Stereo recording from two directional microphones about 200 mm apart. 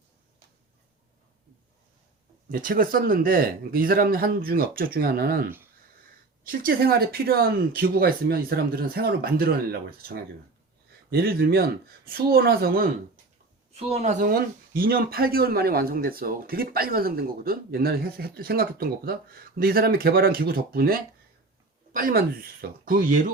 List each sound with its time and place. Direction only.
2.5 s speech: 45° right (ahead or behind)
13.7 s speech: 30° right (ahead or behind)